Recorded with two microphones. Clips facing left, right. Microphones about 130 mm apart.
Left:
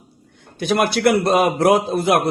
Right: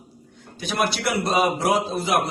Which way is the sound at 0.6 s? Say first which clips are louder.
Left 7 dB; 55° left (ahead or behind).